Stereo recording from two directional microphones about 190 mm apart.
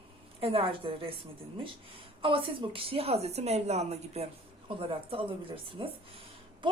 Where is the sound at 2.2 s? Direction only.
25° right (ahead or behind).